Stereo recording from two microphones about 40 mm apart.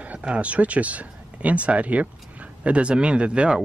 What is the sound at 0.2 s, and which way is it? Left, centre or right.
Speech, right.